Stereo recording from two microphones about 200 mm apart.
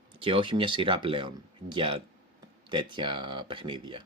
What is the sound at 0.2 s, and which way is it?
Speech, 25° right (ahead or behind).